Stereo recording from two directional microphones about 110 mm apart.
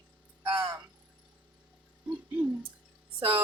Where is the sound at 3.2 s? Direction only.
60° right (ahead or behind).